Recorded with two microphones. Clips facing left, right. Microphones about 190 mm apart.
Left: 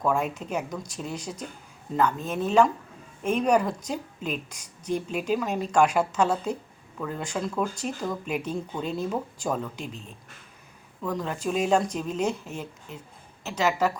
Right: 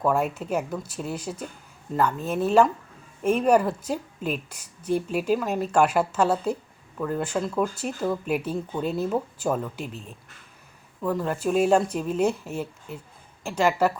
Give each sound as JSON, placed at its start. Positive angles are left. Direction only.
{"t": 0.0, "sound": "speech", "side_deg": -5}
{"t": 11.0, "sound": "speech", "side_deg": -5}